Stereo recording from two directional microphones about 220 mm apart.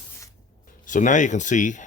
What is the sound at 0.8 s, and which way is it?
Speech, 35° left (ahead or behind).